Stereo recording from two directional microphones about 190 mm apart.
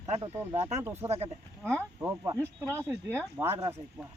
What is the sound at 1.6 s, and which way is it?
Speech, 15° right (ahead or behind).